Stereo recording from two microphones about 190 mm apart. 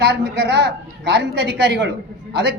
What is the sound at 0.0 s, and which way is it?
Speech, 65° right (ahead or behind).